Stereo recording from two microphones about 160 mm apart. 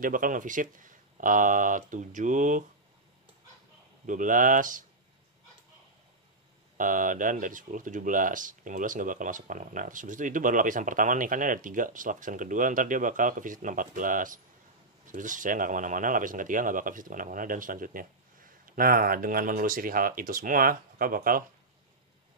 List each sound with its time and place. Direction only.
0.0 s speech: 60° right (ahead or behind)
4.0 s speech: 55° right (ahead or behind)
6.8 s speech: 55° right (ahead or behind)